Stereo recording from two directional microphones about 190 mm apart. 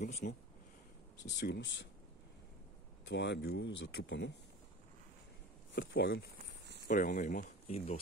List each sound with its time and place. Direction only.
0.0 s speech: 40° left (ahead or behind)
1.3 s speech: 60° left (ahead or behind)
3.1 s speech: 65° left (ahead or behind)
5.8 s speech: 60° left (ahead or behind)
6.3 s a sound: 60° right (ahead or behind)
6.9 s speech: 45° left (ahead or behind)